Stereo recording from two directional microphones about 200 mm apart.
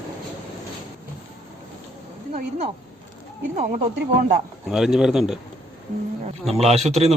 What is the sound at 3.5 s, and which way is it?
Speech, 40° right (ahead or behind).